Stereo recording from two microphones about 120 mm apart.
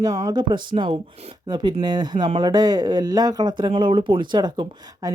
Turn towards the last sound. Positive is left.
turn(degrees=-35)  # may be behind; listen again after turning